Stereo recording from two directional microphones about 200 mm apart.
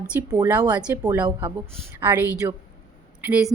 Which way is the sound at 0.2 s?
15° right (ahead or behind).